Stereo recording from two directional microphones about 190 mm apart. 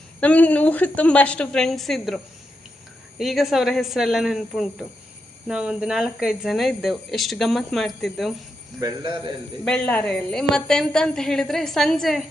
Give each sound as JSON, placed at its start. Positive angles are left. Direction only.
{"t": 0.2, "sound": "a woman's voice", "side_deg": 10}
{"t": 8.8, "sound": "a man's voice", "side_deg": -20}
{"t": 9.6, "sound": "speech", "side_deg": 5}